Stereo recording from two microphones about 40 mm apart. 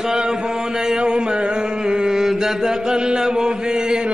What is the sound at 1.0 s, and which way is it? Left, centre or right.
Chant, right.